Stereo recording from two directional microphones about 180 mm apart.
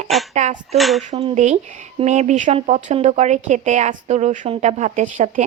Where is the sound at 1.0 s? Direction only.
35° right (ahead or behind).